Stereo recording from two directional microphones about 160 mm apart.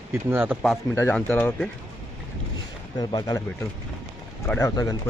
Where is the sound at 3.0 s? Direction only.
25° left (ahead or behind).